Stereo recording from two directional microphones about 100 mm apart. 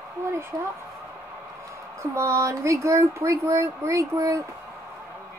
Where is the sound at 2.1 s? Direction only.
30° right (ahead or behind).